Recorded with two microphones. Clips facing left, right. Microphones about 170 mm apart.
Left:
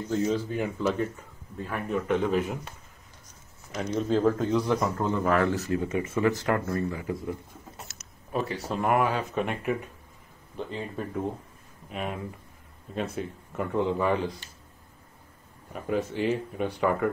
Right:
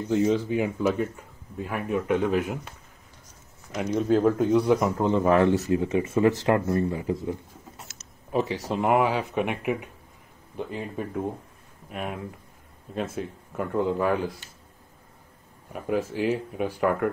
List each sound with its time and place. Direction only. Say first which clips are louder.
0.1 s speech: right 4 dB; 15° right (ahead or behind)
3.7 s a man's voice: right 3 dB; 10° right (ahead or behind)
15.7 s speech: right 2 dB; 5° right (ahead or behind)